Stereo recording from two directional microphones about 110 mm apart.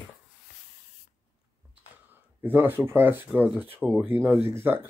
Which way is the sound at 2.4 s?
20° right (ahead or behind).